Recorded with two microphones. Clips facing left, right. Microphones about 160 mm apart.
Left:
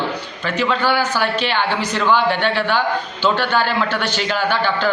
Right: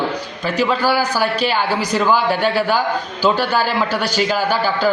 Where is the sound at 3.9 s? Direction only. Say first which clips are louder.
Right 2 dB; 40° right (ahead or behind).